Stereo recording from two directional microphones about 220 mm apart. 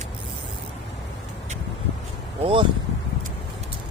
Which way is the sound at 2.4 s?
25° right (ahead or behind).